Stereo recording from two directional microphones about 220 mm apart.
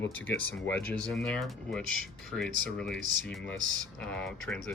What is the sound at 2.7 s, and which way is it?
Speech, centre (ahead or behind).